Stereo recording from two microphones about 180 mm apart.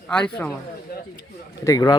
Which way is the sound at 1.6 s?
20° left (ahead or behind).